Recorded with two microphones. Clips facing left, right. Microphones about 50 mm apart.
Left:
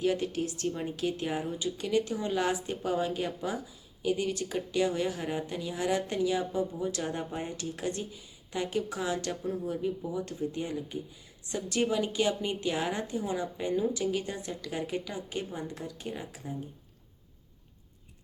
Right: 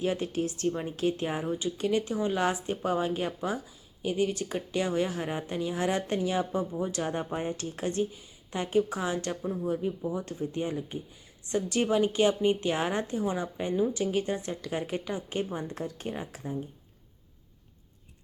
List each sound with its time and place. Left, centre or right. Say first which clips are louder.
0.0 s speech: even; right
10.1 s speech: right 1 dB; right